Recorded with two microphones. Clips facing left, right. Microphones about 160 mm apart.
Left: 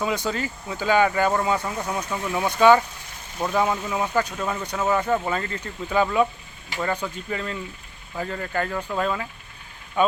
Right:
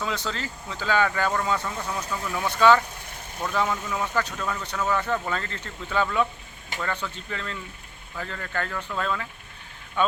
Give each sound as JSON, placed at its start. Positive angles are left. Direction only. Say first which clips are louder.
{"t": 0.0, "sound": "speech", "louder": "left 5 dB", "side_deg": 15}